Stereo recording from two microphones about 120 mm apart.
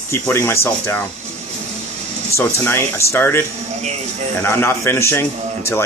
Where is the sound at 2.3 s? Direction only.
20° left (ahead or behind).